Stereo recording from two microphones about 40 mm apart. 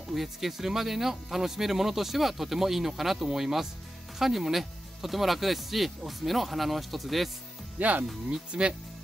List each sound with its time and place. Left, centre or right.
0.1 s speech: centre
7.8 s speech: right
8.3 s speech: right